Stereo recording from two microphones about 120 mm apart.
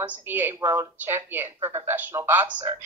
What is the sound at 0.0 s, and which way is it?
Speech, 15° right (ahead or behind).